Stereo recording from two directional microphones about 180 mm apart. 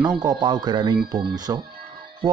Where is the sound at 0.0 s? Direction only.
25° right (ahead or behind).